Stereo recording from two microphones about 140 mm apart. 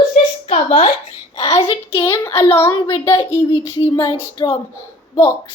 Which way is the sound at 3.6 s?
35° left (ahead or behind).